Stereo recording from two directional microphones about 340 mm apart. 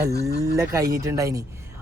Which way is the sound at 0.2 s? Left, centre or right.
Right.